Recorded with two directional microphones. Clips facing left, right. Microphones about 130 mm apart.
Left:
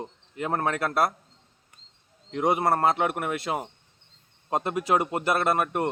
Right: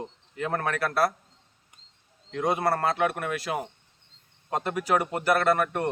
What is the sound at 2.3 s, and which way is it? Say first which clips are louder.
Speech: left 2 dB; 20° left (ahead or behind).